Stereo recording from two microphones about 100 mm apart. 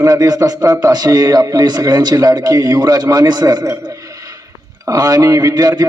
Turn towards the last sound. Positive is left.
turn(degrees=-45)  # may be behind; listen again after turning